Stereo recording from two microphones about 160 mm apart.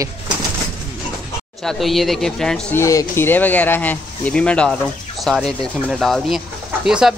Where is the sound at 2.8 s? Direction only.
20° left (ahead or behind).